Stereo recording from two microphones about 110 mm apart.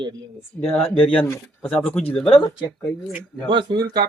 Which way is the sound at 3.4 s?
45° right (ahead or behind).